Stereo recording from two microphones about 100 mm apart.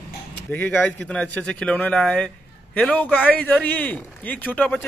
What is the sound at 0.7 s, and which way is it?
Speech, 10° left (ahead or behind).